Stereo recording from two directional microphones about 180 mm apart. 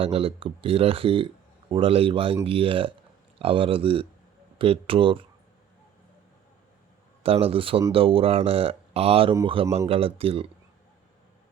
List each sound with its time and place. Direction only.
0.0 s speech: 30° right (ahead or behind)
7.2 s speech: 30° right (ahead or behind)